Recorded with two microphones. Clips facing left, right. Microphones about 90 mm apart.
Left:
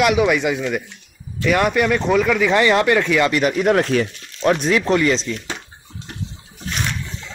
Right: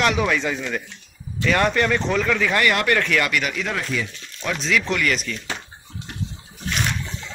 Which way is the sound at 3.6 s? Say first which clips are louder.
Left 10 dB; 60° left (ahead or behind).